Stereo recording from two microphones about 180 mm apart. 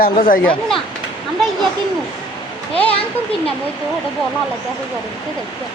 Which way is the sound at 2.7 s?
30° left (ahead or behind).